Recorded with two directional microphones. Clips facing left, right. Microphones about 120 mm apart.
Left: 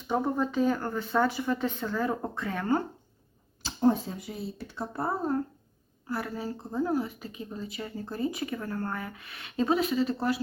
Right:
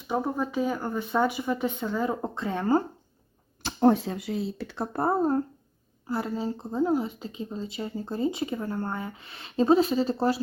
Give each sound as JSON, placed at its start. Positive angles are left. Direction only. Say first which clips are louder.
{"t": 0.1, "sound": "speech", "louder": "even", "side_deg": -5}
{"t": 3.6, "sound": "speech", "louder": "right 4 dB", "side_deg": -65}
{"t": 4.9, "sound": "speech", "louder": "right 5 dB", "side_deg": -45}
{"t": 6.1, "sound": "a woman's voice", "louder": "right 4 dB", "side_deg": -25}